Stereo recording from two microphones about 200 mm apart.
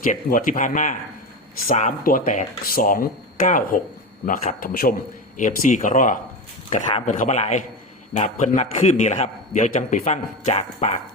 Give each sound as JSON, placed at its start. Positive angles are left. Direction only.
{"t": 0.0, "sound": "a man's voice", "side_deg": 40}